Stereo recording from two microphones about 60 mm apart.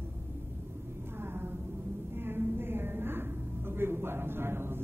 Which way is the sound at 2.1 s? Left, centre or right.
Right.